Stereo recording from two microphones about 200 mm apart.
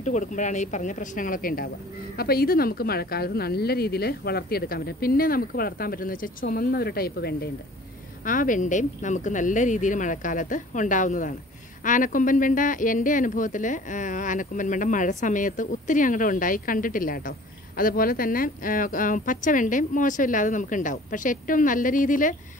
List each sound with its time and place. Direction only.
0.0 s a woman's voice: 40° left (ahead or behind)